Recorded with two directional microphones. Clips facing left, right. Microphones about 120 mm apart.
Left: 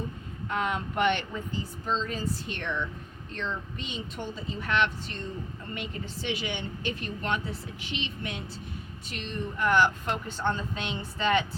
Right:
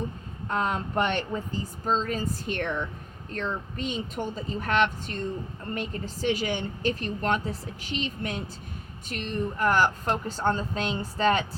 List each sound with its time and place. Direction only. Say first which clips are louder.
0.4 s a woman's voice: right 2 dB; 35° right (ahead or behind)